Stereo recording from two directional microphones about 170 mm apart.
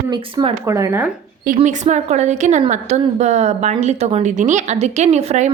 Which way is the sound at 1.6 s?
45° right (ahead or behind).